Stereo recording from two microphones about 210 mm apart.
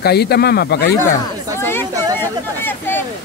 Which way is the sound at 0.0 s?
50° left (ahead or behind).